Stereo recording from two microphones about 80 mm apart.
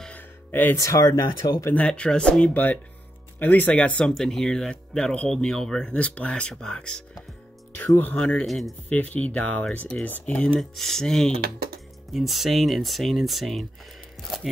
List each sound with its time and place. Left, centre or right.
0.1 s music: left
0.7 s speech: left
1.7 s speech: centre
8.0 s speech: centre
8.5 s speech: centre
8.8 s speech: centre